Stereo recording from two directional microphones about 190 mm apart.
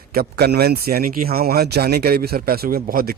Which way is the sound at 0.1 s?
55° right (ahead or behind).